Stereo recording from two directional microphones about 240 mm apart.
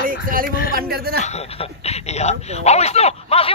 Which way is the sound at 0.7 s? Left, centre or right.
Right.